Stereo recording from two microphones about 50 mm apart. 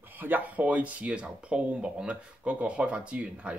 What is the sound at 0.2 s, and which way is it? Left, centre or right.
Speech, right.